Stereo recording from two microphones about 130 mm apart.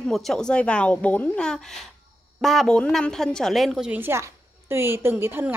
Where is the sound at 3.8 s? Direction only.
15° right (ahead or behind).